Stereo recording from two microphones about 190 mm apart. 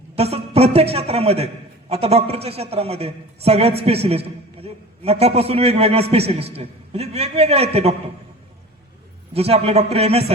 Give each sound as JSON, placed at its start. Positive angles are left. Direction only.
{"t": 0.2, "sound": "a man's voice", "side_deg": -30}
{"t": 9.3, "sound": "a man's voice", "side_deg": -30}